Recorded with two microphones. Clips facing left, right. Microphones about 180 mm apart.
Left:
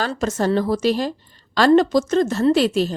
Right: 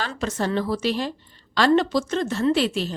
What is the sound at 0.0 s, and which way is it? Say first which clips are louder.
A woman's voice: left 5 dB; 45° left (ahead or behind).